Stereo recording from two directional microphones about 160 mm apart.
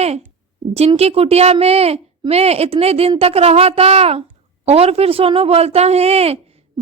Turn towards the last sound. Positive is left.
turn(degrees=-40)  # may be behind; listen again after turning